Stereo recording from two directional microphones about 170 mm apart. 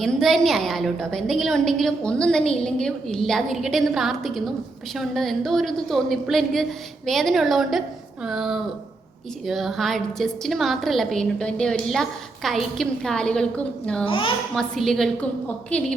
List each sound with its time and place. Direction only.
0.0 s a woman's voice: centre (ahead or behind)
14.1 s a child's voice: 30° left (ahead or behind)
14.5 s a woman's voice: centre (ahead or behind)